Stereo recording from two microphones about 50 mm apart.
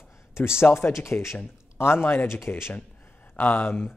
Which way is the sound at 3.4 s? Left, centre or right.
Left.